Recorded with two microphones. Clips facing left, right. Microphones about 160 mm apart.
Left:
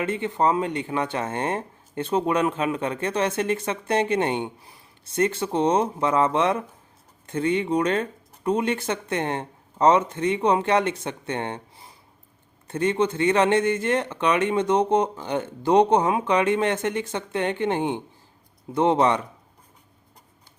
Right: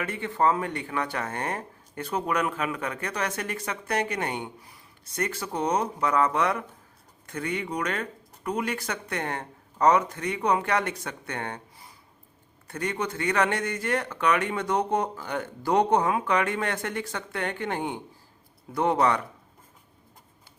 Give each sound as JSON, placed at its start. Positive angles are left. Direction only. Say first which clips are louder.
{"t": 0.0, "sound": "speech", "louder": "left 3 dB", "side_deg": 20}